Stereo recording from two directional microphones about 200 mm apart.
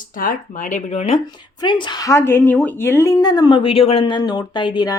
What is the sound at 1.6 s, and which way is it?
A woman's voice, 20° left (ahead or behind).